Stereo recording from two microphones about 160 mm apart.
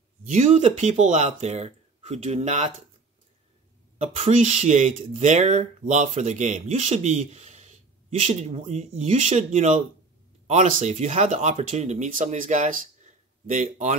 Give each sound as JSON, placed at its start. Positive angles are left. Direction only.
{"t": 0.3, "sound": "speech", "side_deg": -45}
{"t": 4.0, "sound": "speech", "side_deg": -45}
{"t": 11.3, "sound": "speech", "side_deg": -40}